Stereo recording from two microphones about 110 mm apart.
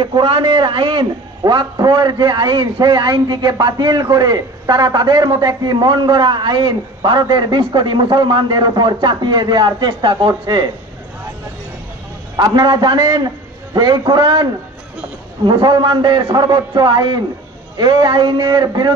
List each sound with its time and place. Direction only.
0.0 s a man's voice: 50° right (ahead or behind)
1.4 s a man's voice: 40° right (ahead or behind)
12.4 s a man's voice: 45° right (ahead or behind)